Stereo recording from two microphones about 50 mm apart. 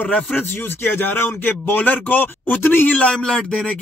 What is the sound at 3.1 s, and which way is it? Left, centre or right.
Speech, centre.